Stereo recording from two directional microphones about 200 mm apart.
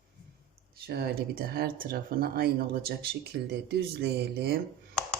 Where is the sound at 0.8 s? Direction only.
50° right (ahead or behind).